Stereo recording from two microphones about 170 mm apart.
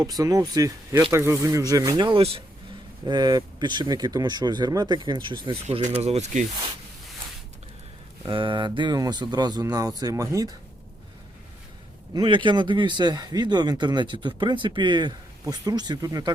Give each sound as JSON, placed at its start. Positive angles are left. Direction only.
{"t": 0.0, "sound": "speech", "side_deg": -20}
{"t": 5.6, "sound": "speech", "side_deg": -40}
{"t": 8.2, "sound": "speech", "side_deg": -30}
{"t": 12.1, "sound": "speech", "side_deg": -30}